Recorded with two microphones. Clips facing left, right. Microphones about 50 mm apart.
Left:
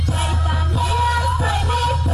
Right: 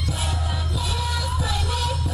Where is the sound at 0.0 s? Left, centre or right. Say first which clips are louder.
Left 5 dB; left.